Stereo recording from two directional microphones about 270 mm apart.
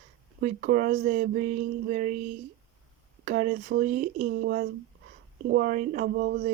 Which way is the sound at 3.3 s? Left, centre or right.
Right.